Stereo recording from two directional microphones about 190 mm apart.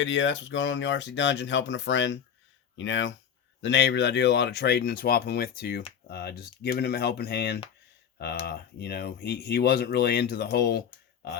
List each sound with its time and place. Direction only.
0.0 s speech: 75° left (ahead or behind)
3.6 s speech: 65° left (ahead or behind)